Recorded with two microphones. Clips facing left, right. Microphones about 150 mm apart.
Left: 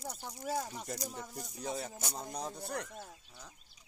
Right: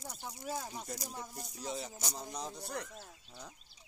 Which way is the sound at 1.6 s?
55° left (ahead or behind).